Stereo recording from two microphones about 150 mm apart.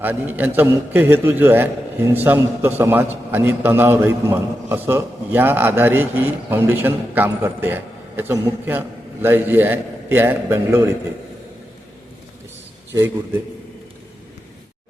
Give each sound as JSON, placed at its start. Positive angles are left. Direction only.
{"t": 0.0, "sound": "a man's voice", "side_deg": -10}
{"t": 12.9, "sound": "a man's voice", "side_deg": -20}